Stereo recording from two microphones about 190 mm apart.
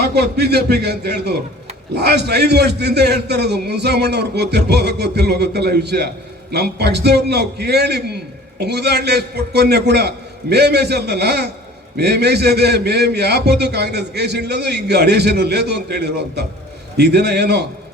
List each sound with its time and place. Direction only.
0.0 s a man's voice: 60° right (ahead or behind)